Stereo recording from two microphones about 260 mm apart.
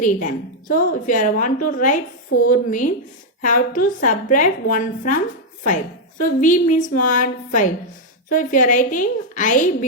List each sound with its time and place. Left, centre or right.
0.0 s a woman's voice: left